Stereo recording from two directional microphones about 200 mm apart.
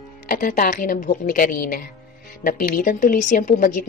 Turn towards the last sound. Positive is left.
turn(degrees=40)  # may be behind; listen again after turning